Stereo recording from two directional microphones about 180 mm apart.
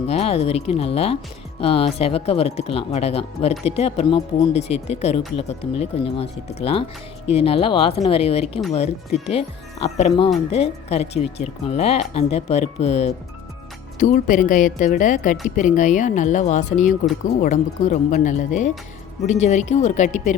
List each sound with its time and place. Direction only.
0.1 s a woman's voice: 35° left (ahead or behind)